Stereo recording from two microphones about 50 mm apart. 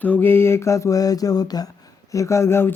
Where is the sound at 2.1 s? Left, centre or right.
Left.